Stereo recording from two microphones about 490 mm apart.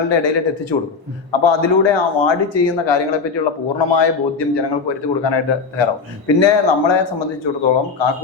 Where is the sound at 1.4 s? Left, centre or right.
Left.